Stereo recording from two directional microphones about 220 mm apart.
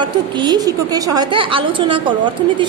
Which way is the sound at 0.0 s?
20° right (ahead or behind).